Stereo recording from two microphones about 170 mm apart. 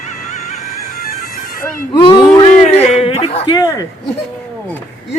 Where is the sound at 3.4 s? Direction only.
20° left (ahead or behind).